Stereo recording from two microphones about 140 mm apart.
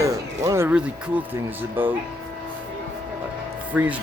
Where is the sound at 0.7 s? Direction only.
10° right (ahead or behind).